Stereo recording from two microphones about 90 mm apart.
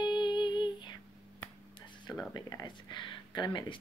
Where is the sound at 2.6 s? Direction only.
60° left (ahead or behind).